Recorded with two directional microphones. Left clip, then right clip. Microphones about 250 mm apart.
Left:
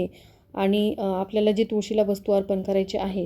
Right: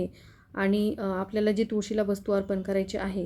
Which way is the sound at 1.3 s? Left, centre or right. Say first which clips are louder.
Left 4 dB; centre.